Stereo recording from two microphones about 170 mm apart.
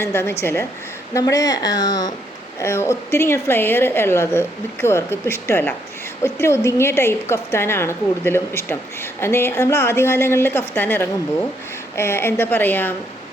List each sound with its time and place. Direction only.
0.0 s a woman's voice: 15° left (ahead or behind)